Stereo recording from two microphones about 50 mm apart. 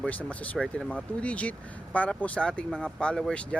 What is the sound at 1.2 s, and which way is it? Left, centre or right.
Speech, left.